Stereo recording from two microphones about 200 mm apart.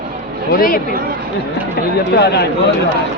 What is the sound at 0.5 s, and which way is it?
Speech, 45° left (ahead or behind).